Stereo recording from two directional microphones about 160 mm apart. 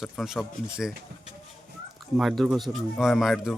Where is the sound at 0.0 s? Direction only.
Centre (ahead or behind).